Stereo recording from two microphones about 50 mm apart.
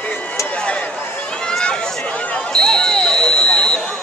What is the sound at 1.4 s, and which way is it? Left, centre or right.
Run, centre.